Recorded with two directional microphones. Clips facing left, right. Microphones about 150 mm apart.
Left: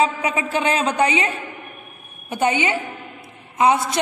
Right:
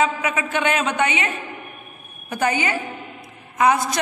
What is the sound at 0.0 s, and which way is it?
A woman's voice, 30° left (ahead or behind).